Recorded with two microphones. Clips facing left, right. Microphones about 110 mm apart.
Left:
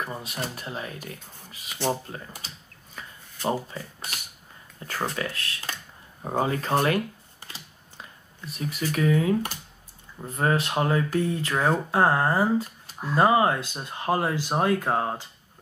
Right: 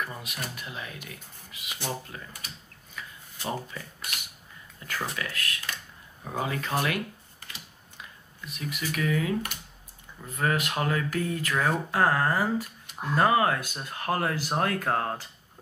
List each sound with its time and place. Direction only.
0.0 s speech: 30° left (ahead or behind)
3.0 s a sound: 35° left (ahead or behind)
3.7 s speech: 35° left (ahead or behind)
7.4 s computer keyboard: 35° left (ahead or behind)
10.2 s speech: 30° left (ahead or behind)